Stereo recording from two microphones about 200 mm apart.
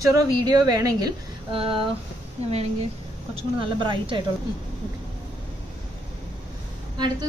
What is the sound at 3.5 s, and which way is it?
Speech, 25° right (ahead or behind).